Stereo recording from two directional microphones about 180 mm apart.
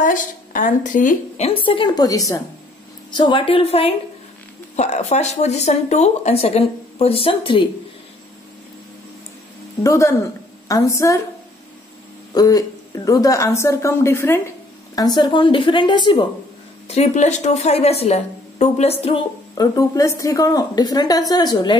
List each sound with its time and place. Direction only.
0.0 s a woman's voice: 45° left (ahead or behind); by 7.6 s 30° left (ahead or behind)
9.8 s a woman's voice: 15° left (ahead or behind)
12.4 s a woman's voice: 20° left (ahead or behind)
16.8 s speech: 35° left (ahead or behind)
19.5 s a woman's voice: 20° left (ahead or behind)